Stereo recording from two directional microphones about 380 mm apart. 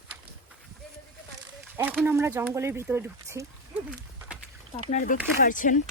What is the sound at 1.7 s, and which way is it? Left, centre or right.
Speech, centre.